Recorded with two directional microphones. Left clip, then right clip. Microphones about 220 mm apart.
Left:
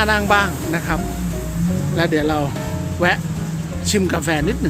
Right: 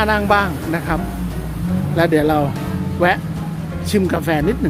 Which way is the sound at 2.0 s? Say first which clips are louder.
Right 4 dB; 10° right (ahead or behind).